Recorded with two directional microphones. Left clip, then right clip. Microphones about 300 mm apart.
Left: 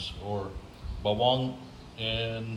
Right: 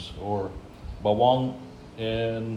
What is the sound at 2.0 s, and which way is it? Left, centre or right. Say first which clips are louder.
Speech: right 4 dB; centre.